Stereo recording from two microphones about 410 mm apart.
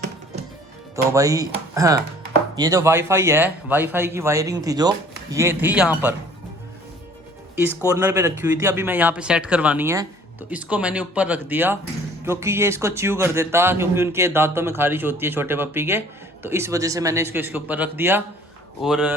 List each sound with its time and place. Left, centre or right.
1.1 s a man's voice: centre
7.5 s a man's voice: centre